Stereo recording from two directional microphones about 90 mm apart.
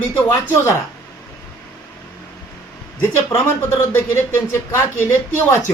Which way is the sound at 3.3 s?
30° left (ahead or behind).